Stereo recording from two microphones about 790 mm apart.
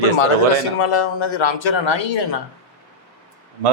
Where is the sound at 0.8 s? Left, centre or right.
Left.